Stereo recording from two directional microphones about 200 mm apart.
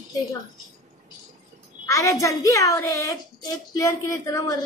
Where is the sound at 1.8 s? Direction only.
15° left (ahead or behind).